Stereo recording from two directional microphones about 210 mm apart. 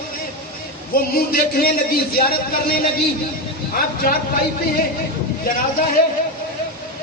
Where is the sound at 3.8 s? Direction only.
45° left (ahead or behind).